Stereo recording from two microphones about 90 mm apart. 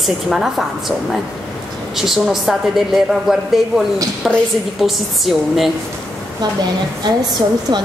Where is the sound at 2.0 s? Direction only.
5° right (ahead or behind).